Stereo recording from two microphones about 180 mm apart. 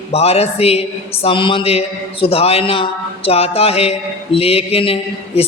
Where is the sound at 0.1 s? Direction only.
35° left (ahead or behind).